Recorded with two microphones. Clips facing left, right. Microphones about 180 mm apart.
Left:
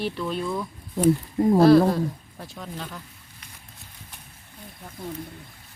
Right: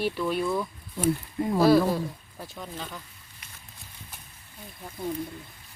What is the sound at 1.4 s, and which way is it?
Speech, 45° left (ahead or behind).